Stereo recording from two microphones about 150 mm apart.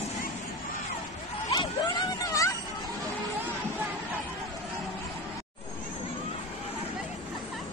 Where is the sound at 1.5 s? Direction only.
30° left (ahead or behind).